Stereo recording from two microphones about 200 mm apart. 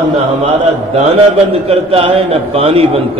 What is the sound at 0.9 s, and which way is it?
A man's voice, 30° right (ahead or behind).